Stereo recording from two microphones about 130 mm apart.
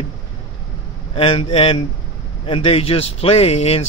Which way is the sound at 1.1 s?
45° left (ahead or behind).